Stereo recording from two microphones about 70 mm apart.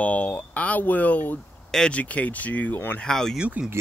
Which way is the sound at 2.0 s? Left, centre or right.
Centre.